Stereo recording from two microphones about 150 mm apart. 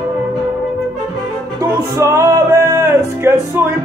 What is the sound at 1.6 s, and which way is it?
Music, 20° right (ahead or behind).